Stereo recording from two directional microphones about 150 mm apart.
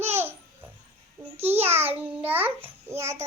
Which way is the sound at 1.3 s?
15° right (ahead or behind).